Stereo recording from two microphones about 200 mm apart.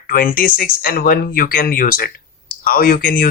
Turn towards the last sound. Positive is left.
turn(degrees=45)  # may be behind; listen again after turning